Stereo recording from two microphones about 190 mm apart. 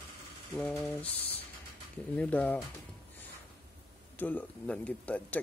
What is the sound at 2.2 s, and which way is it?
Speech, 5° left (ahead or behind).